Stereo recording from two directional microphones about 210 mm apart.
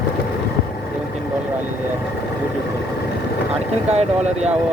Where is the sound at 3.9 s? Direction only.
30° right (ahead or behind).